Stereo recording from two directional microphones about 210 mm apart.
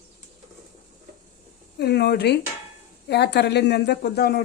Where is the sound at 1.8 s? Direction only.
50° left (ahead or behind).